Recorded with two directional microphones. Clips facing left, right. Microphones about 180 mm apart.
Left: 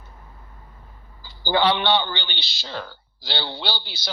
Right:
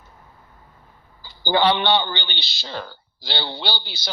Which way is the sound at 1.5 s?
25° right (ahead or behind).